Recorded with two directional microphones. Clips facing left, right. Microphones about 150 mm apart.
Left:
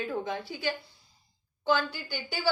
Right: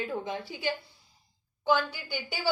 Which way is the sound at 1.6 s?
10° right (ahead or behind).